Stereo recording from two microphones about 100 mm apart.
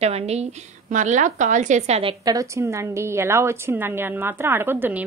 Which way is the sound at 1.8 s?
80° right.